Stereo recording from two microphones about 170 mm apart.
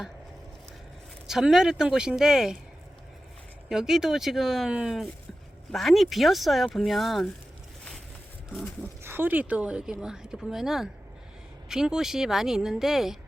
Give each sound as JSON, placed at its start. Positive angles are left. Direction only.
{"t": 1.3, "sound": "speech", "side_deg": -5}
{"t": 3.7, "sound": "speech", "side_deg": -5}
{"t": 9.0, "sound": "speech", "side_deg": -10}